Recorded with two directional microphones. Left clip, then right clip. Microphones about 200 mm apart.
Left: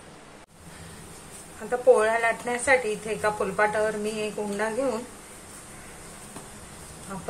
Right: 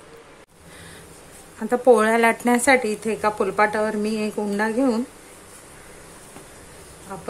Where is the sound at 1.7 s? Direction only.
45° right (ahead or behind).